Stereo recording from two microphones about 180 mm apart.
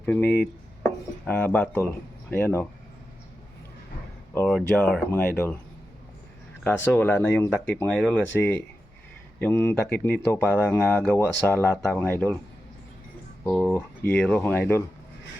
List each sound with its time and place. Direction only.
0.0 s cutlery: 10° left (ahead or behind)
2.3 s speech: 10° left (ahead or behind)
4.4 s speech: 5° left (ahead or behind)
6.7 s speech: 10° left (ahead or behind)
13.4 s speech: 10° left (ahead or behind)